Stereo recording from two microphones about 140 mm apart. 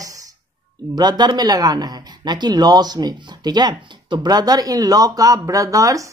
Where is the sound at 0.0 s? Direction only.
25° right (ahead or behind).